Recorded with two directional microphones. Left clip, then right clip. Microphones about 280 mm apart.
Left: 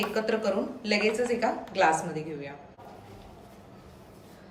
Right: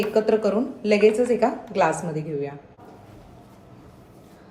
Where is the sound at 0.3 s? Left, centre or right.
Centre.